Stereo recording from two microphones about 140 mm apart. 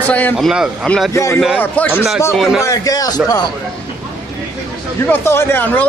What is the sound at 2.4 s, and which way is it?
Speech, centre (ahead or behind).